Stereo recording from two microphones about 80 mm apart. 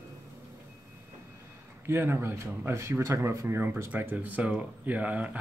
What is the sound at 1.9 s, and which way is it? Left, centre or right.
Speech, right.